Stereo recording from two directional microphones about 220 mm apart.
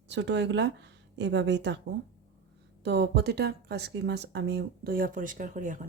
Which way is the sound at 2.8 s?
50° right (ahead or behind).